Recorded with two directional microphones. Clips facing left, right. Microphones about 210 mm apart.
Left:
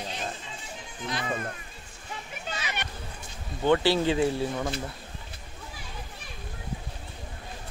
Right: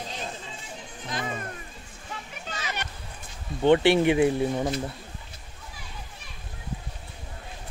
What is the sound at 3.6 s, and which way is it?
Speech, 25° right (ahead or behind).